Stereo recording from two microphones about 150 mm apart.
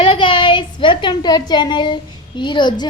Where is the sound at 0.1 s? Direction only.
35° left (ahead or behind).